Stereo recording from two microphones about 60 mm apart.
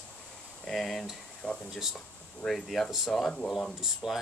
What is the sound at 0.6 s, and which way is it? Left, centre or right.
Speech, centre.